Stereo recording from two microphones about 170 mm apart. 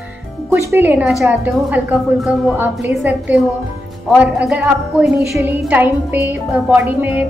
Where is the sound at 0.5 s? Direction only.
15° right (ahead or behind).